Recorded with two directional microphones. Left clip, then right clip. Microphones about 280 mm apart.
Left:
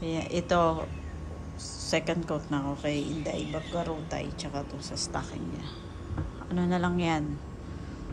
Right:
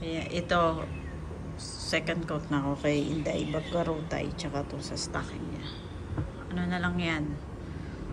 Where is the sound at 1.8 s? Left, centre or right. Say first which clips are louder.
Left 1 dB; centre.